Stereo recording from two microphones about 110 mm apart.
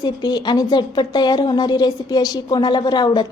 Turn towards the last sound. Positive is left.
turn(degrees=40)  # may be behind; listen again after turning